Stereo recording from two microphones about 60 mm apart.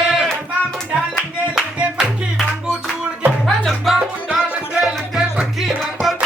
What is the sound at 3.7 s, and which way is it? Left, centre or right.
Music, centre.